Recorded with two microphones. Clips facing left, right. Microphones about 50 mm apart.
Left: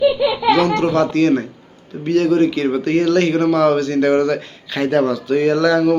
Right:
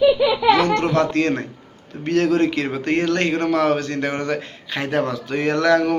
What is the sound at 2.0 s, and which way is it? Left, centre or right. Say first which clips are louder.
A man's voice: left 3 dB; right.